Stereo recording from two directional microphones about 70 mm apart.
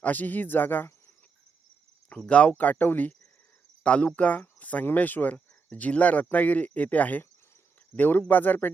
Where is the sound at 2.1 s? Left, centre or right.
Centre.